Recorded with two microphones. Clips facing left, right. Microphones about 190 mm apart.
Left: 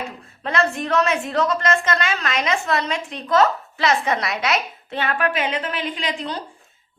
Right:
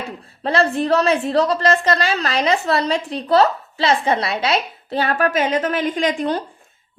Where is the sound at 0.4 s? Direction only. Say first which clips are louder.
Right 5 dB; 35° right (ahead or behind).